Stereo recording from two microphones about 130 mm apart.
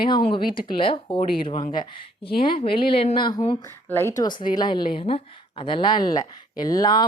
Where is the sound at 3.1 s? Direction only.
35° left (ahead or behind).